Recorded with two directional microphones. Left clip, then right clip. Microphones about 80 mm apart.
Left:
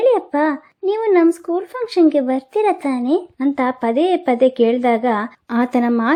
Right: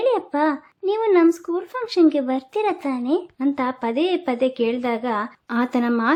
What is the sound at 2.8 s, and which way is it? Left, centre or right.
Speech, left.